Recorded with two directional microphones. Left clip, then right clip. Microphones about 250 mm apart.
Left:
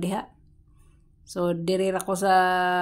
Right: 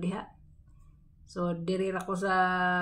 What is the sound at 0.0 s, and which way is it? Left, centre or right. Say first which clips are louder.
Speech: left 7 dB; left.